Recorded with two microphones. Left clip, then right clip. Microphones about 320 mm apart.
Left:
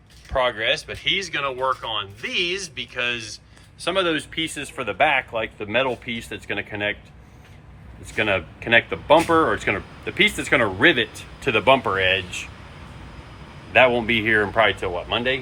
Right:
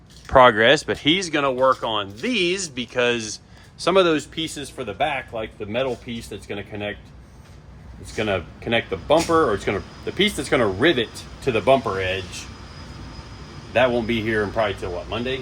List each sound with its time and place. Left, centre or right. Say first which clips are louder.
0.3 s speech: right 8 dB; right
1.1 s speech: right 2 dB; centre
8.1 s speech: left 2 dB; centre
13.7 s speech: left 3 dB; centre